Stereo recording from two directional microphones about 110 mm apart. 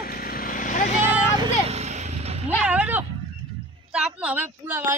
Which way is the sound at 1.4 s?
70° right (ahead or behind).